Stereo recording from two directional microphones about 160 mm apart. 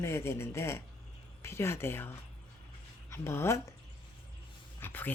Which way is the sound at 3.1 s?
15° left (ahead or behind).